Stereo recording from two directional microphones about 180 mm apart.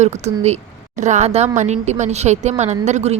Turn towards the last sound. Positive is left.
turn(degrees=-40)  # may be behind; listen again after turning